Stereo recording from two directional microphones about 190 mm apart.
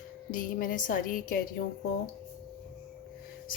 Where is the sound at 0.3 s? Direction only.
45° left (ahead or behind).